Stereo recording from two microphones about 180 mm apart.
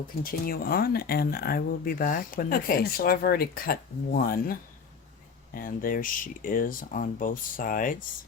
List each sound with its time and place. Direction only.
0.2 s speech: 55° left (ahead or behind)
5.5 s speech: 50° left (ahead or behind)